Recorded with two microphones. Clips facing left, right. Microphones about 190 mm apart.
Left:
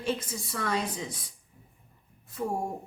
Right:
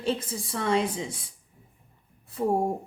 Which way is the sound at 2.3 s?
35° right (ahead or behind).